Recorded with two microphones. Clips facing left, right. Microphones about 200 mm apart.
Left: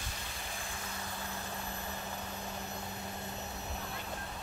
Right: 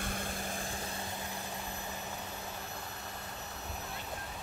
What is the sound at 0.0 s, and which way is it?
Vehicle, 50° right (ahead or behind).